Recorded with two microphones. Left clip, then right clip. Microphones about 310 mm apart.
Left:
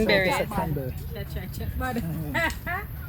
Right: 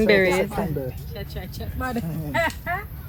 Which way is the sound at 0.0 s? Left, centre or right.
Centre.